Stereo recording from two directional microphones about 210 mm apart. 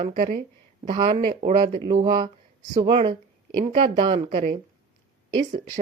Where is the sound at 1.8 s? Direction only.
20° right (ahead or behind).